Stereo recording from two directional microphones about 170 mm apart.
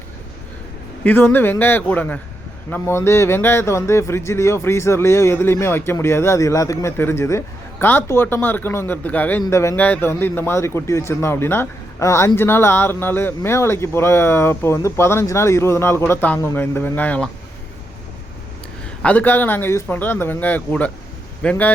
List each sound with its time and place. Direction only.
1.0 s speech: 10° left (ahead or behind)
19.0 s speech: 10° left (ahead or behind)